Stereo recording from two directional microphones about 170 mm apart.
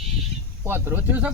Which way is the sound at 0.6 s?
15° right (ahead or behind).